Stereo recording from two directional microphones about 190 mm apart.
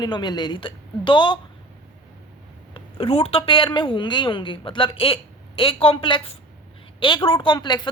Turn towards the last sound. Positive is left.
turn(degrees=20)  # may be behind; listen again after turning